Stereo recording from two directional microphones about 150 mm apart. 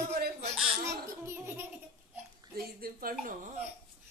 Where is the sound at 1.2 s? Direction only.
15° right (ahead or behind).